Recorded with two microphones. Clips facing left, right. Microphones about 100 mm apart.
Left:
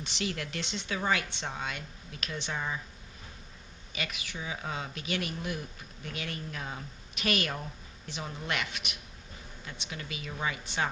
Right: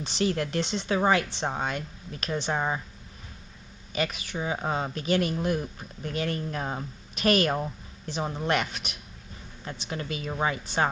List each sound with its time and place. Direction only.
0.0 s speech: 35° right (ahead or behind)
3.9 s speech: 40° right (ahead or behind)